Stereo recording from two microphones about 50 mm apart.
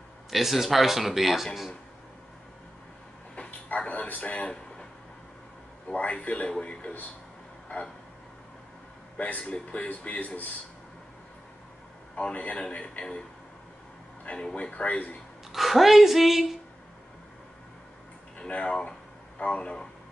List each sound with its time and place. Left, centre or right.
0.3 s speech: centre
3.3 s bow-wow: left
4.1 s speech: left
5.9 s speech: left
9.1 s speech: left
12.2 s speech: left
14.2 s speech: left
15.5 s speech: centre
18.4 s speech: centre